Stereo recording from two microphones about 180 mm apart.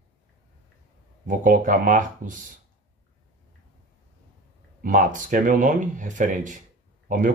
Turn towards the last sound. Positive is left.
turn(degrees=-45)  # may be behind; listen again after turning